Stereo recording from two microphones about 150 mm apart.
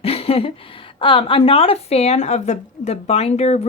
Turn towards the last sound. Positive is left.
turn(degrees=45)  # may be behind; listen again after turning